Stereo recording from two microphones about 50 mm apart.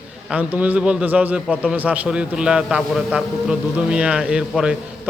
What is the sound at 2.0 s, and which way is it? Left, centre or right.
A man's voice, centre.